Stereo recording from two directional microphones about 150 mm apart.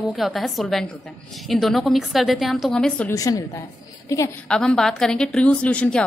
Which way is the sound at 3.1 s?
25° left (ahead or behind).